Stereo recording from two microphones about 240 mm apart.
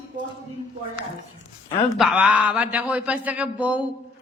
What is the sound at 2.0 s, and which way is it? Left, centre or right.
A man's voice, centre.